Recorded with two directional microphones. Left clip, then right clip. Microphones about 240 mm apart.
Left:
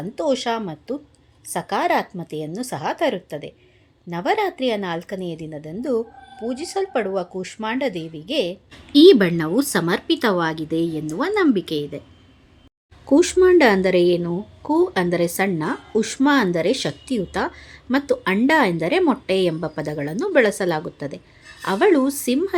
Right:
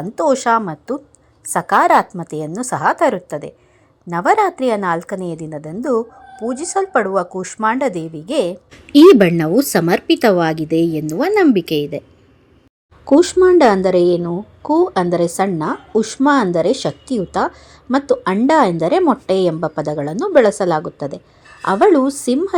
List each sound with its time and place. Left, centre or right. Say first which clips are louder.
0.2 s speech: right 8 dB; centre
13.1 s a woman's voice: right 4 dB; centre